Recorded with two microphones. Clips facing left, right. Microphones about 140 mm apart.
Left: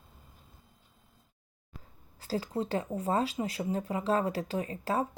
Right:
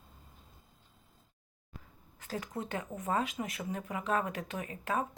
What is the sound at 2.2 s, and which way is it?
Speech, 30° left (ahead or behind).